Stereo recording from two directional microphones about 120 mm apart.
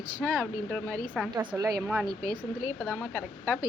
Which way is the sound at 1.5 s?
30° right (ahead or behind).